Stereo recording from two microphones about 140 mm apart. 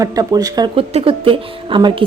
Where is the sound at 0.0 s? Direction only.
25° right (ahead or behind).